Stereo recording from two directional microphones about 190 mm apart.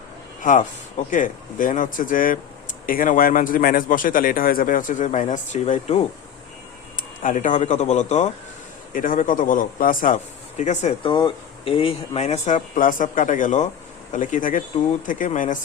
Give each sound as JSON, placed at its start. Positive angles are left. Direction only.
{"t": 0.4, "sound": "a man's voice", "side_deg": 45}
{"t": 7.2, "sound": "a man's voice", "side_deg": 45}